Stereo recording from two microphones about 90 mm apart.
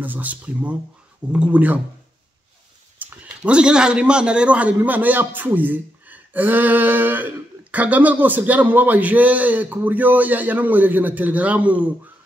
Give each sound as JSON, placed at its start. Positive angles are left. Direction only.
{"t": 0.0, "sound": "a man's voice", "side_deg": -20}
{"t": 3.0, "sound": "a man's voice", "side_deg": -20}